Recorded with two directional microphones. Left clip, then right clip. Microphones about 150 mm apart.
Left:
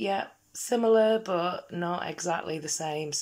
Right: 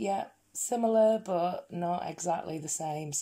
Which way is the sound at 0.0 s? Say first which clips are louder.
Left 2 dB; 30° right (ahead or behind).